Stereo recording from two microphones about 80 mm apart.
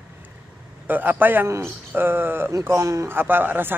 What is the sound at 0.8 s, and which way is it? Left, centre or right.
Speech, right.